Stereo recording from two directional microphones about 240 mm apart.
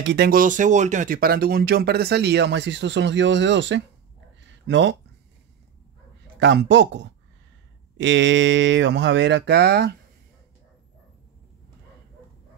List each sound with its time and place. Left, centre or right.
0.0 s speech: right
6.4 s speech: right